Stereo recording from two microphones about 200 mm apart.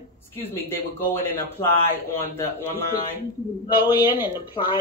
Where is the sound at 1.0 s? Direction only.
10° left (ahead or behind).